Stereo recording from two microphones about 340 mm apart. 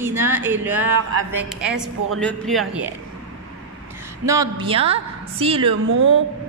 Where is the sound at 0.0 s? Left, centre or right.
Centre.